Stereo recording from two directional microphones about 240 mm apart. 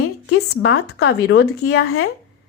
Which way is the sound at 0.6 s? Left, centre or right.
Left.